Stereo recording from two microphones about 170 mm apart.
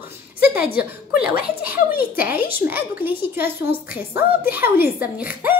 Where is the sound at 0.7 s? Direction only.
65° left (ahead or behind).